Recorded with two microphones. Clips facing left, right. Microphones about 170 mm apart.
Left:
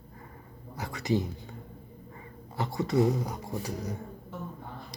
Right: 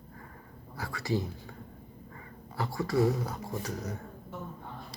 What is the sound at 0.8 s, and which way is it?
Speech, 20° left (ahead or behind).